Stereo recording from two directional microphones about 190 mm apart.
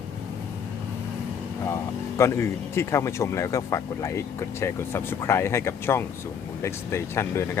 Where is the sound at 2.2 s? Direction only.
15° left (ahead or behind).